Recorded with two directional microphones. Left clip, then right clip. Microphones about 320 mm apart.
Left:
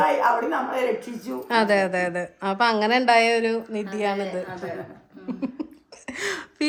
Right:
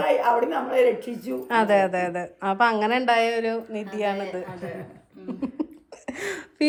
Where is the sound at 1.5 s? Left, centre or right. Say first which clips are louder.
Even; centre.